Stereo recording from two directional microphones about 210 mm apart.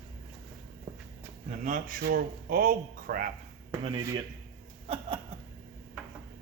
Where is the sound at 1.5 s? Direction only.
35° right (ahead or behind).